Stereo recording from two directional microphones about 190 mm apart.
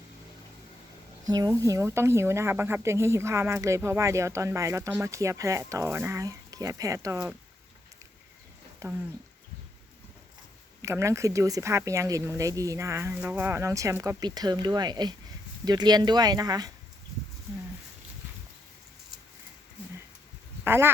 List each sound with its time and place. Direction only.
1.3 s speech: 20° right (ahead or behind)
8.8 s speech: 15° right (ahead or behind)
10.8 s speech: 15° right (ahead or behind)
20.7 s speech: 10° right (ahead or behind)